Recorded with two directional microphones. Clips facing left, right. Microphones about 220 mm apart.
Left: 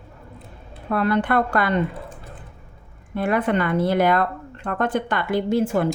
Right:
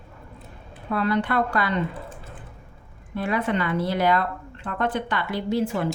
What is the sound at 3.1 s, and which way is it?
Speech, 55° left (ahead or behind).